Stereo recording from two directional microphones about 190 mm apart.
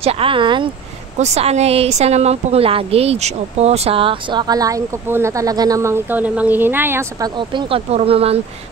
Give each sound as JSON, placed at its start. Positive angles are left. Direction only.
{"t": 0.0, "sound": "speech", "side_deg": -30}
{"t": 7.3, "sound": "speech", "side_deg": -25}